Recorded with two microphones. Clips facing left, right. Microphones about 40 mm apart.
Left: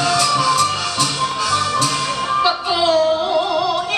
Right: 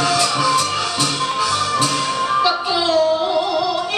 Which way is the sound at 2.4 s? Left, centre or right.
Centre.